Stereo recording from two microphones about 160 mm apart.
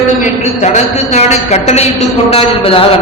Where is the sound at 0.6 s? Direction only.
45° left (ahead or behind).